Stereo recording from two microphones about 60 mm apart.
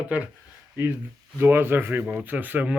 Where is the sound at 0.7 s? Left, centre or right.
Right.